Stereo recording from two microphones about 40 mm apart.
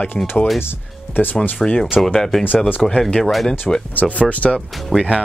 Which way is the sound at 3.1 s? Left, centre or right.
Left.